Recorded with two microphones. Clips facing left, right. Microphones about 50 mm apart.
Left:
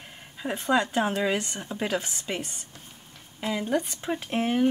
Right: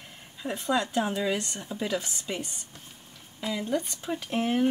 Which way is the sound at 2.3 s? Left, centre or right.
Left.